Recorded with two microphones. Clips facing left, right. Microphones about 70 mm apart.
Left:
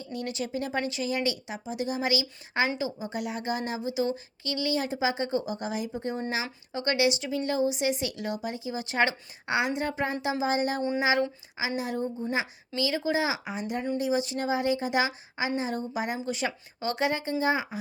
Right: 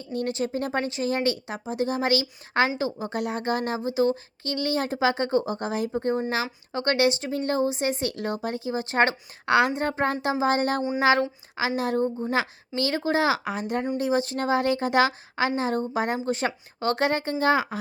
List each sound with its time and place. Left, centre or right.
0.0 s a woman's voice: right
16.8 s a woman's voice: right